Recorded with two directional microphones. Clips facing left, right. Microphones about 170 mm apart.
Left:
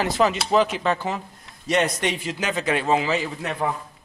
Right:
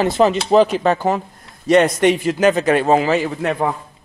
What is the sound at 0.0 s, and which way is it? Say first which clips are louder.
A man's voice: right 6 dB; 30° right (ahead or behind).